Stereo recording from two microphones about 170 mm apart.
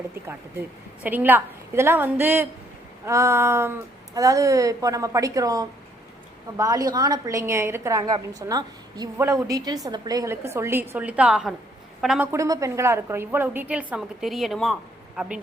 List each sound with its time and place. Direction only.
1.0 s a woman's voice: 10° right (ahead or behind)
12.3 s a woman's voice: 20° right (ahead or behind)